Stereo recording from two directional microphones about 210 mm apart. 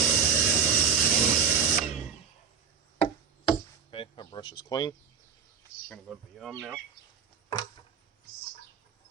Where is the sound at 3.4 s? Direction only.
25° left (ahead or behind).